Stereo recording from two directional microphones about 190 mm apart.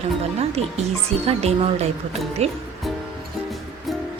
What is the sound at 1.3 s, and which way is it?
A woman's voice, 35° right (ahead or behind).